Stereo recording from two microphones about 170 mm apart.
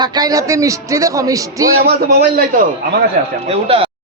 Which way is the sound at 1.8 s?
65° right (ahead or behind).